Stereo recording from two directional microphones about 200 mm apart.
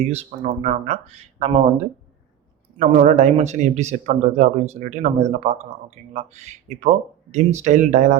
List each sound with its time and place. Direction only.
0.0 s a man's voice: 35° right (ahead or behind)